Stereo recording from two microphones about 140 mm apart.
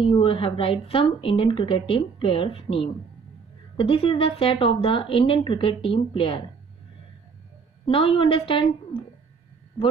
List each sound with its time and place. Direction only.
0.0 s a woman's voice: 40° left (ahead or behind)
7.8 s a woman's voice: 45° left (ahead or behind)